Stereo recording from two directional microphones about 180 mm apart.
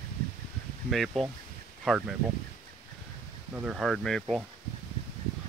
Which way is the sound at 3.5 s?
5° right (ahead or behind).